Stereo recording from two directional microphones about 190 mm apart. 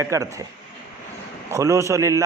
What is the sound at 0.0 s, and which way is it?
Speech, 15° right (ahead or behind).